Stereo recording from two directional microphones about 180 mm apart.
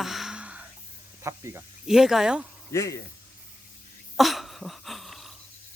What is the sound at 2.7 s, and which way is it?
Speech, 15° left (ahead or behind).